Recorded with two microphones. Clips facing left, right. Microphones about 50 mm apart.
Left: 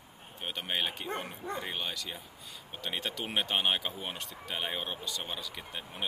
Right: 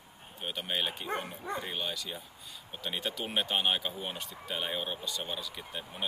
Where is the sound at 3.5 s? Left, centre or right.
Left.